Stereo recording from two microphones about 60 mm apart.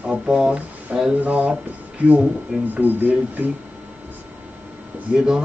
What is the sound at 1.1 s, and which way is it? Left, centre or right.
Speech, right.